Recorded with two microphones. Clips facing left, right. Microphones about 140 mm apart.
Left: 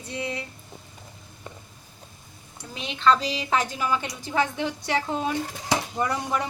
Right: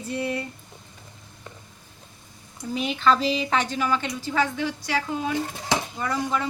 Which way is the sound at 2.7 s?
Centre (ahead or behind).